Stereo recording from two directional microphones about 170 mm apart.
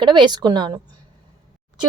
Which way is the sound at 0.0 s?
25° right (ahead or behind).